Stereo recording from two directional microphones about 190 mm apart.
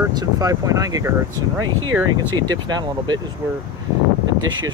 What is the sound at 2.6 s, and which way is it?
Speech, 20° right (ahead or behind).